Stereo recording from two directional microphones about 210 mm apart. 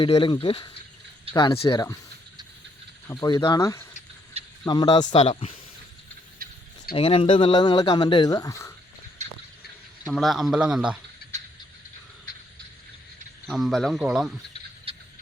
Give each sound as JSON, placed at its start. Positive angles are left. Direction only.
{"t": 0.0, "sound": "speech", "side_deg": 25}
{"t": 3.1, "sound": "speech", "side_deg": 20}
{"t": 5.0, "sound": "speech", "side_deg": 35}
{"t": 6.4, "sound": "a sound", "side_deg": -45}
{"t": 6.9, "sound": "speech", "side_deg": 25}
{"t": 9.2, "sound": "a sound", "side_deg": -35}
{"t": 10.0, "sound": "a man's voice", "side_deg": 0}
{"t": 11.2, "sound": "a sound", "side_deg": 50}
{"t": 13.5, "sound": "a man's voice", "side_deg": 0}
{"t": 14.9, "sound": "rodents", "side_deg": -25}